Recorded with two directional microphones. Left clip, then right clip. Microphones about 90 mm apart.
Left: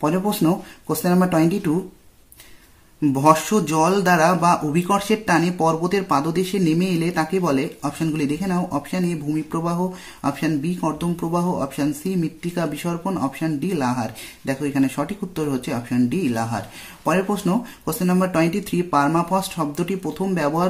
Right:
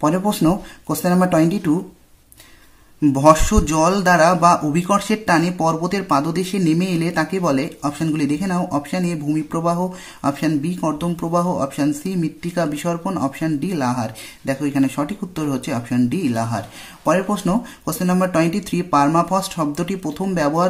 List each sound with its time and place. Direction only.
0.0 s a man's voice: 30° right (ahead or behind)
3.0 s a man's voice: 30° right (ahead or behind)